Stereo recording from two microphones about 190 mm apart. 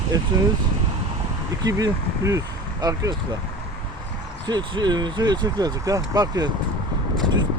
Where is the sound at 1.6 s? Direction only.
20° right (ahead or behind).